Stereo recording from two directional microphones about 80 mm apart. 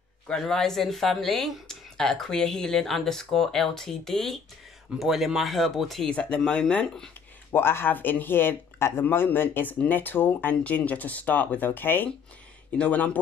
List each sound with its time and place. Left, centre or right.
0.3 s speech: centre
6.1 s speech: centre
7.5 s speech: left